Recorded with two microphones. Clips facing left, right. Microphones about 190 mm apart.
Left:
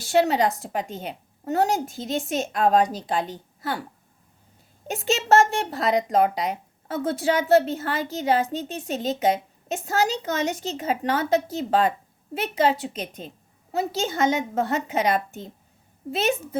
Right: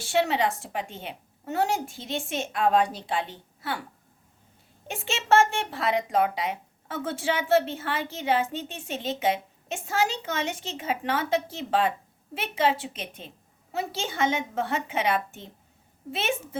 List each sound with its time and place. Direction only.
0.0 s speech: 40° left (ahead or behind)
4.9 s speech: 40° left (ahead or behind)